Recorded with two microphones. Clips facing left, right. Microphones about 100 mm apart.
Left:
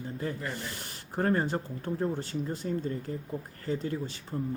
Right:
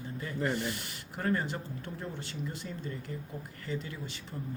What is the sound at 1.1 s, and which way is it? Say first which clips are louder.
Speech: left 5 dB; 40° left (ahead or behind).